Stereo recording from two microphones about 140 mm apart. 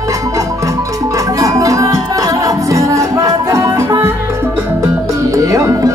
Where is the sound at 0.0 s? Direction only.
20° right (ahead or behind).